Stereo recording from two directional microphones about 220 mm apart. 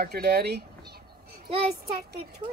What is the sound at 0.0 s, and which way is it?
Speech, 45° right (ahead or behind).